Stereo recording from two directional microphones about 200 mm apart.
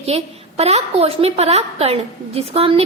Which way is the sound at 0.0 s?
30° right (ahead or behind).